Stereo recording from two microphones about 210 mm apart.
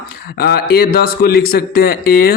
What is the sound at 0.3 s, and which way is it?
A man's voice, 45° left (ahead or behind).